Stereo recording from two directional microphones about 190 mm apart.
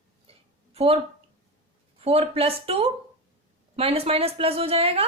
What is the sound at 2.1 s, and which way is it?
A woman's voice, 30° right (ahead or behind).